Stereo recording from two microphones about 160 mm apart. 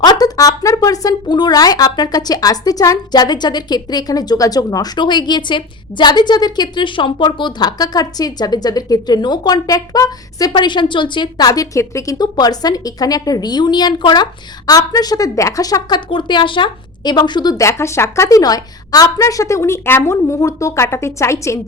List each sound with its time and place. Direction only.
0.0 s speech: 25° left (ahead or behind)